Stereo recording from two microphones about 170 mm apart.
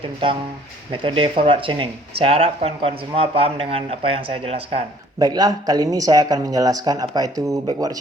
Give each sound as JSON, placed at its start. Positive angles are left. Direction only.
{"t": 1.0, "sound": "speech", "side_deg": -30}
{"t": 5.2, "sound": "speech", "side_deg": -25}